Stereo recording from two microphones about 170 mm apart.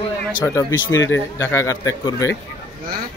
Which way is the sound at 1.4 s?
15° left (ahead or behind).